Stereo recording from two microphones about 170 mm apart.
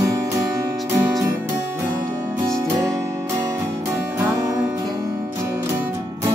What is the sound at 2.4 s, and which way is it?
Music, 20° right (ahead or behind).